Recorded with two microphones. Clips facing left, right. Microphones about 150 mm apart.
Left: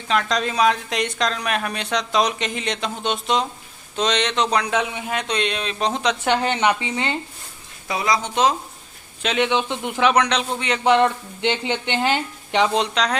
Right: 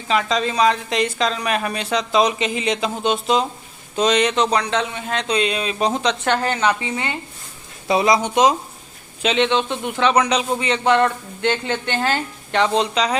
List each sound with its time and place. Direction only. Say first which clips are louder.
0.1 s speech: right 2 dB; centre (ahead or behind)
5.3 s speech: right 6 dB; 5° right (ahead or behind)
6.2 s a woman's voice: left 1 dB; 20° left (ahead or behind)
7.9 s speech: right 6 dB; 25° right (ahead or behind)
9.2 s speech: right 2 dB; 5° left (ahead or behind)
10.0 s speech: right 1 dB; centre (ahead or behind)
10.8 s speech: left 1 dB; 15° left (ahead or behind)
12.7 s speech: right 2 dB; 5° right (ahead or behind)